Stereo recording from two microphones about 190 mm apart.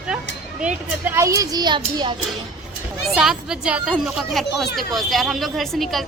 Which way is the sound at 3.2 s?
5° right (ahead or behind).